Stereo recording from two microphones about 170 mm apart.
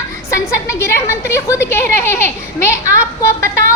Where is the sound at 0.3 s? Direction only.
15° left (ahead or behind).